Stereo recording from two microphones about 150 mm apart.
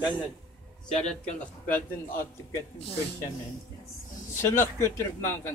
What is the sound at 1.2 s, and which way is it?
Speech, 10° left (ahead or behind).